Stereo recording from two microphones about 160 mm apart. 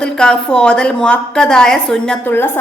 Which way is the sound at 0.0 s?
5° left (ahead or behind).